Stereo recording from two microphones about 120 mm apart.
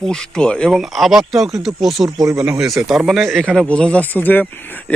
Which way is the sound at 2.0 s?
30° right (ahead or behind).